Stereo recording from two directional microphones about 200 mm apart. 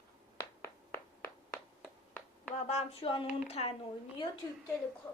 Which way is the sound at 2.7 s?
30° left (ahead or behind).